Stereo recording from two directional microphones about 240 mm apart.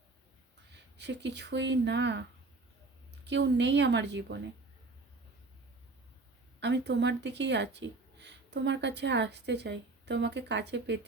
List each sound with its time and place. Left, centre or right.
0.9 s speech: right
3.2 s speech: right
6.6 s speech: right